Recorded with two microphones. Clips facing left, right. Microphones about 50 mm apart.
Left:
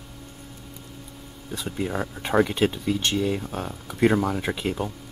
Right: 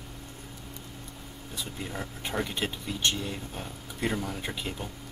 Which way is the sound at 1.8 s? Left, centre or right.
Left.